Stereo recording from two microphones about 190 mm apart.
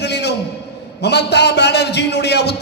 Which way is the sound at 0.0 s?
60° left (ahead or behind).